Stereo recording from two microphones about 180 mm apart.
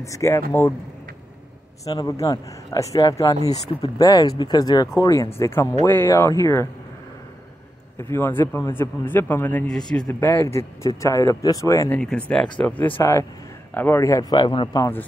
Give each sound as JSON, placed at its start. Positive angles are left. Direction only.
{"t": 0.0, "sound": "a man's voice", "side_deg": 15}
{"t": 1.9, "sound": "a man's voice", "side_deg": 20}
{"t": 8.0, "sound": "a man's voice", "side_deg": 15}
{"t": 12.0, "sound": "a man's voice", "side_deg": 5}